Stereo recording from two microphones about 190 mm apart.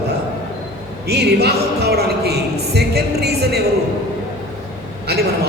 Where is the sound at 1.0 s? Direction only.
60° right (ahead or behind).